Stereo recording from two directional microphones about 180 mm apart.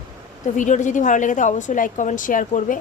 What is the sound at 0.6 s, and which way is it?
Speech, 45° left (ahead or behind).